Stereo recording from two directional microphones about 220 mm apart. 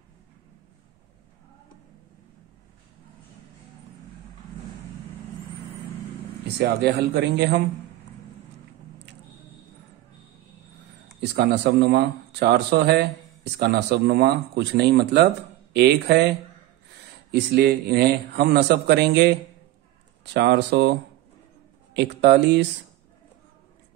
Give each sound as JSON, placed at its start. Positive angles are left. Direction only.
{"t": 6.6, "sound": "speech", "side_deg": -45}
{"t": 11.1, "sound": "speech", "side_deg": -50}
{"t": 20.3, "sound": "speech", "side_deg": -50}